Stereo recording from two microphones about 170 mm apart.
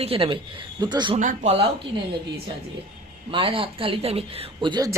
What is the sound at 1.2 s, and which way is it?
Speech, 50° right (ahead or behind).